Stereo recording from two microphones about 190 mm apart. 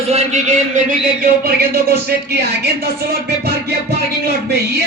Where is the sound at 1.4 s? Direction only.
55° right (ahead or behind).